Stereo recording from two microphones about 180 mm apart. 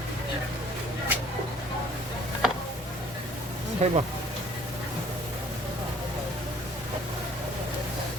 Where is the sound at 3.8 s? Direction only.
35° right (ahead or behind).